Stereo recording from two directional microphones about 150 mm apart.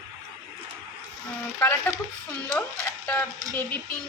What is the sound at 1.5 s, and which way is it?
Speech, 15° left (ahead or behind).